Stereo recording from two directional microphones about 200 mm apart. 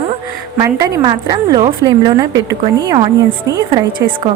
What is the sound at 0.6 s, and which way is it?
A woman's voice, 15° right (ahead or behind).